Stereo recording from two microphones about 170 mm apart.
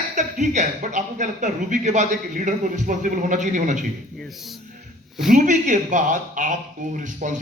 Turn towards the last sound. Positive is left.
turn(degrees=-50)  # may be behind; listen again after turning